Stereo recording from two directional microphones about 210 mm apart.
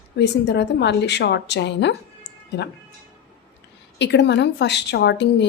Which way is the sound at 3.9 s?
55° left (ahead or behind).